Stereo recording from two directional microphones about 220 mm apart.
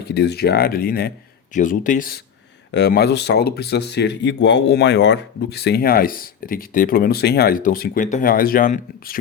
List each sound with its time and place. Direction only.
0.0 s speech: 50° left (ahead or behind)